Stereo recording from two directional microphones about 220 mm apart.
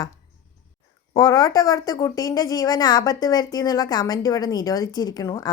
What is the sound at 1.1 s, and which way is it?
A woman's voice, 15° left (ahead or behind).